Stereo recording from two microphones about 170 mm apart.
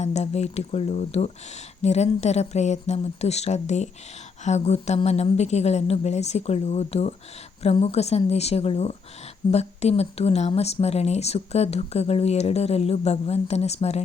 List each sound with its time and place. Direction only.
0.0 s speech: 40° left (ahead or behind)